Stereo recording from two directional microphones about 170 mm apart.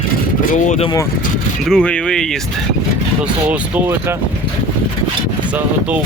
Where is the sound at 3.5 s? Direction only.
10° right (ahead or behind).